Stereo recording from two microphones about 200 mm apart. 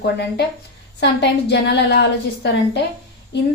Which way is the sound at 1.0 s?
60° left (ahead or behind).